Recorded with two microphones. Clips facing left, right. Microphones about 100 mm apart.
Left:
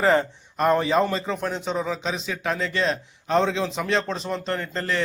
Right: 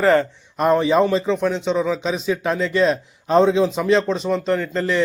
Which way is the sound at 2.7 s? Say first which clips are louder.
Right 7 dB; 10° right (ahead or behind).